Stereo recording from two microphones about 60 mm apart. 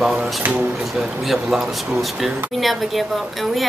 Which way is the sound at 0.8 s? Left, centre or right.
Centre.